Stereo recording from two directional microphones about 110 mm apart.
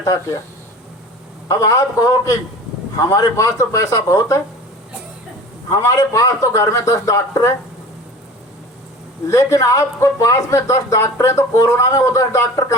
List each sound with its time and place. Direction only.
0.0 s speech: 25° left (ahead or behind)
1.5 s speech: 30° left (ahead or behind)
5.7 s speech: 30° left (ahead or behind)
9.2 s speech: 30° left (ahead or behind)